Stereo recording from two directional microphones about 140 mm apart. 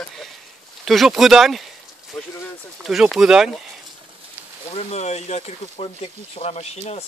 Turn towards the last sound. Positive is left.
turn(degrees=50)  # may be behind; listen again after turning